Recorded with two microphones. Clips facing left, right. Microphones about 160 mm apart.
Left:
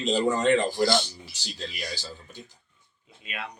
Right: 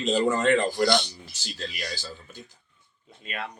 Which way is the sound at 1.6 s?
Centre (ahead or behind).